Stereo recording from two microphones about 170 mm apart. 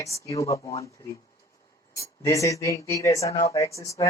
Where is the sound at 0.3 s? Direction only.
20° left (ahead or behind).